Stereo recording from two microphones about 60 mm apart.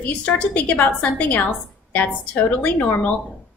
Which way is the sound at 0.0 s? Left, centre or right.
Left.